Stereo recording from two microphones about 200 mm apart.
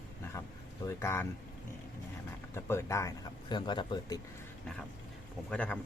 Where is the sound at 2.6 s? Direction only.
15° left (ahead or behind).